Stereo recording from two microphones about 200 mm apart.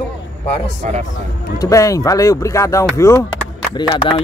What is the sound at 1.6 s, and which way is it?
Speech, 15° left (ahead or behind).